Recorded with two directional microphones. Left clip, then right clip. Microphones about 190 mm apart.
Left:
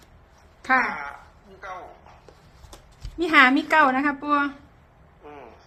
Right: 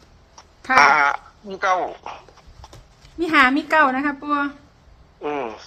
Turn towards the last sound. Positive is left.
turn(degrees=-65)  # may be behind; listen again after turning